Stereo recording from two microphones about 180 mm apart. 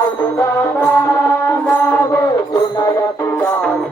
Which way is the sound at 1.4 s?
10° left (ahead or behind).